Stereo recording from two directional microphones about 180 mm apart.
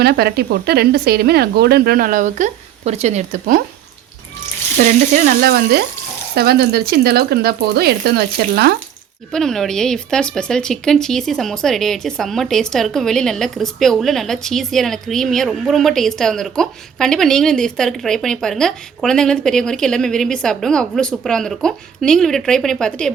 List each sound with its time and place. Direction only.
0.0 s speech: 60° right (ahead or behind); by 3.6 s 45° right (ahead or behind)
4.8 s speech: 50° right (ahead or behind)
9.3 s speech: centre (ahead or behind)